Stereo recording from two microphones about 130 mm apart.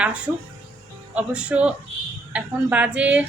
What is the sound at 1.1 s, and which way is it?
A woman's voice, 10° right (ahead or behind).